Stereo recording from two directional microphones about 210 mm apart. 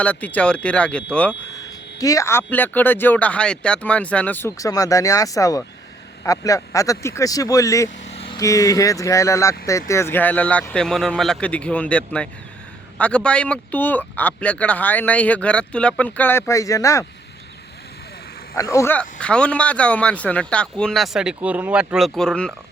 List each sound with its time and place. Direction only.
0.0 s speech: 5° left (ahead or behind)
1.6 s speech: 15° left (ahead or behind)
8.0 s speech: 30° left (ahead or behind)
18.5 s speech: 15° left (ahead or behind)